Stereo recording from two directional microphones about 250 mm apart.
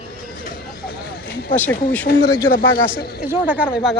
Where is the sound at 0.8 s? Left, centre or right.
Left.